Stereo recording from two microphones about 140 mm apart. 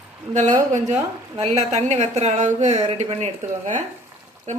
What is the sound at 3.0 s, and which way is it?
Speech, 50° right (ahead or behind).